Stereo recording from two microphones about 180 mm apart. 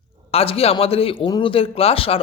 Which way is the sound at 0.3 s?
35° left (ahead or behind).